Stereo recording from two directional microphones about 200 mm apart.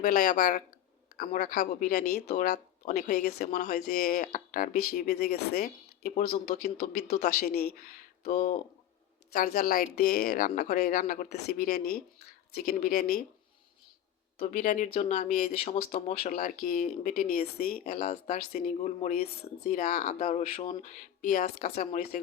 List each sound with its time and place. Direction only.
0.0 s speech: 40° left (ahead or behind)
3.5 s speech: 40° left (ahead or behind)
3.8 s speech: 50° left (ahead or behind)
6.7 s speech: 55° left (ahead or behind)
14.3 s speech: 35° left (ahead or behind)